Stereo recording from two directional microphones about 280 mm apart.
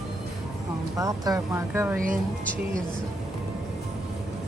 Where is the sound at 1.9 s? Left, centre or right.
Right.